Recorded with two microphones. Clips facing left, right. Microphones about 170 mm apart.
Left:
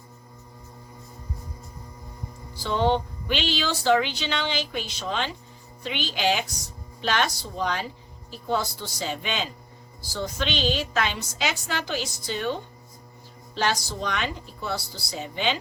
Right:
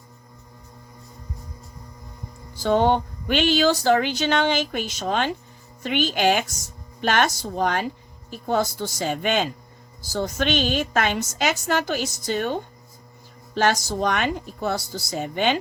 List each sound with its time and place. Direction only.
2.6 s speech: 50° right (ahead or behind)